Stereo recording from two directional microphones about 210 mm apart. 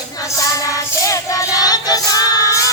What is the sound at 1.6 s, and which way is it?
Music, 20° left (ahead or behind).